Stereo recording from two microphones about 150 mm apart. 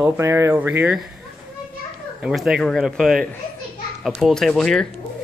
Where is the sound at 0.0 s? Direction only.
20° right (ahead or behind).